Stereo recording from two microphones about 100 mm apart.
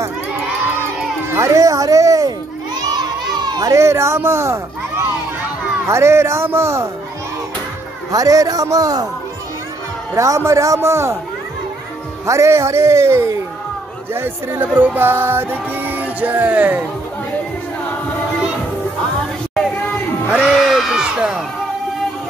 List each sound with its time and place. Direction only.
1.3 s children playing: 30° right (ahead or behind)
3.3 s a sound: 40° right (ahead or behind)
3.7 s speech: 25° right (ahead or behind)
5.9 s music: 25° right (ahead or behind)
8.1 s a man's voice: 35° right (ahead or behind)
10.1 s music: 30° right (ahead or behind)
12.3 s music: 30° right (ahead or behind)
20.2 s music: 10° right (ahead or behind)